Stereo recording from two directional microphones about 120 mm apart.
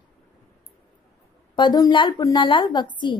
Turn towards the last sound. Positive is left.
turn(degrees=40)  # may be behind; listen again after turning